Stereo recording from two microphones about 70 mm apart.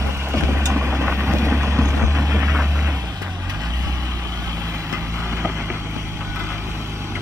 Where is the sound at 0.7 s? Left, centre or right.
Right.